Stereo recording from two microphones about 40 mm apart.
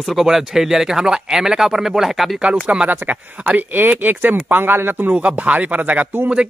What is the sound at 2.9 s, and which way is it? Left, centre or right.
Speech, right.